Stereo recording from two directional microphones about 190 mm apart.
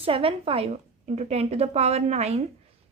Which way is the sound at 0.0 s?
30° right (ahead or behind).